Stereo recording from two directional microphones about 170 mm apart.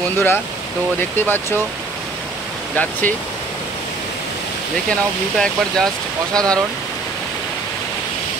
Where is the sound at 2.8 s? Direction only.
10° left (ahead or behind).